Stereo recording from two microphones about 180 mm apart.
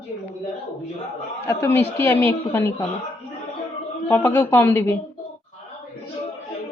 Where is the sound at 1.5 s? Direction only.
15° left (ahead or behind).